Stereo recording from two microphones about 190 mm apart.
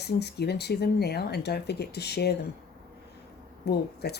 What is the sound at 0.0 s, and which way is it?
Speech, 60° left (ahead or behind).